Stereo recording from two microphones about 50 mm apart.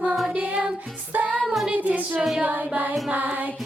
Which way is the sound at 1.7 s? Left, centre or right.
Right.